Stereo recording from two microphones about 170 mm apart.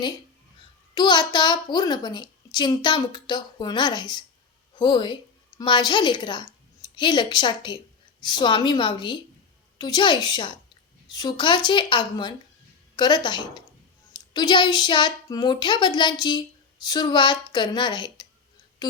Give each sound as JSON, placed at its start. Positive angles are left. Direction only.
{"t": 0.9, "sound": "a child's voice", "side_deg": 25}